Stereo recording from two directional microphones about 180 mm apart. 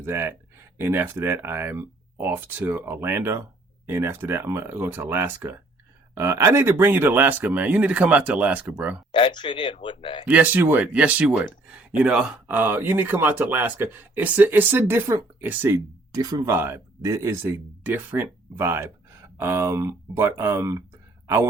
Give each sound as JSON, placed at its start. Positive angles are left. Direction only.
{"t": 0.0, "sound": "speech", "side_deg": -15}
{"t": 9.1, "sound": "speech", "side_deg": 30}
{"t": 10.2, "sound": "speech", "side_deg": -10}